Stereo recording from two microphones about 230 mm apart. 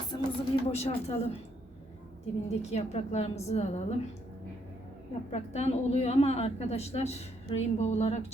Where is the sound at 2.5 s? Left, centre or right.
Left.